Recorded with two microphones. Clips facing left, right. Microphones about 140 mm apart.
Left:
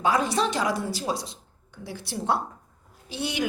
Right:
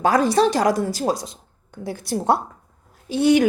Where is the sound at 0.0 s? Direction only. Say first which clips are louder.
Right 7 dB; 40° right (ahead or behind).